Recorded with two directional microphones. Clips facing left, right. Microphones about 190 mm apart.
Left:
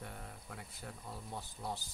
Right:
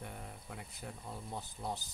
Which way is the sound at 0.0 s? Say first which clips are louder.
Right 1 dB; 15° right (ahead or behind).